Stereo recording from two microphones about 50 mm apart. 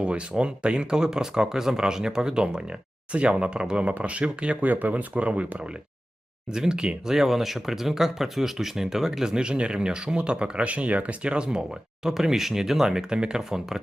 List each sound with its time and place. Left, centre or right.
0.0 s speech: right
4.7 s speech: right; by 13.8 s centre